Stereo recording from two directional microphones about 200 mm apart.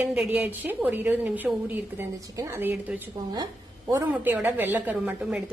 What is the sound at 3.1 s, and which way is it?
Speech, 20° right (ahead or behind).